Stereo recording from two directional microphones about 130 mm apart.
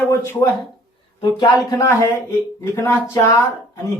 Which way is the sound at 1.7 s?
25° left (ahead or behind).